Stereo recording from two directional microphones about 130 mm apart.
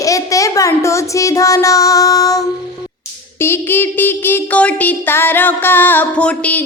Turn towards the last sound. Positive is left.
turn(degrees=10)  # may be behind; listen again after turning